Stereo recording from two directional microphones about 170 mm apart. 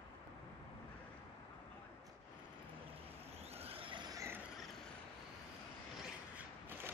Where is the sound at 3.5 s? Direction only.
35° right (ahead or behind); by 4.4 s 20° right (ahead or behind).